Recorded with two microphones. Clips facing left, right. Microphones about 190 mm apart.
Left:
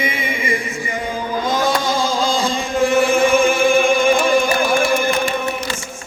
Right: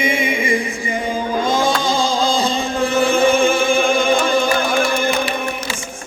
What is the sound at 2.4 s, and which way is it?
Chant, 30° right (ahead or behind).